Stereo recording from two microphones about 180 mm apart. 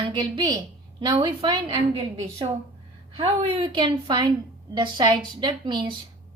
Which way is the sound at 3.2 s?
30° right (ahead or behind).